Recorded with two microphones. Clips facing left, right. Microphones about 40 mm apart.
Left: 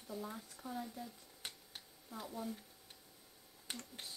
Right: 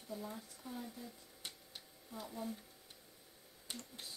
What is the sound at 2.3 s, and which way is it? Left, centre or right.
Speech, centre.